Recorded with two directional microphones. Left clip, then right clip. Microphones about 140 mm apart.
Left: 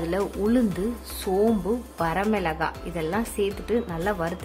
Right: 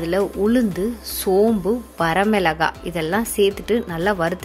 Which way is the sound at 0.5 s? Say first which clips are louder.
Right 4 dB; 20° right (ahead or behind).